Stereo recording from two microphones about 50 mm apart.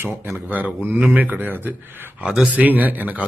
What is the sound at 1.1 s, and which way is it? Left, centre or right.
A man's voice, right.